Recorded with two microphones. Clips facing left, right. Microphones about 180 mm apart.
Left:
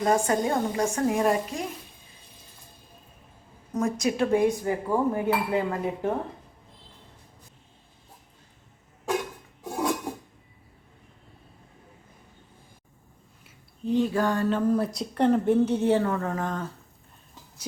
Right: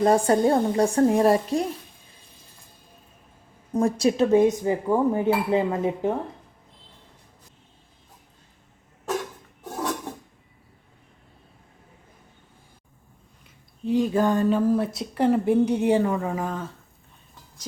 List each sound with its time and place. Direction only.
0.0 s a woman's voice: 35° right (ahead or behind)
3.7 s speech: 30° right (ahead or behind)
9.7 s dishes: 10° left (ahead or behind)
13.9 s speech: 15° right (ahead or behind)
14.7 s a woman's voice: 5° right (ahead or behind)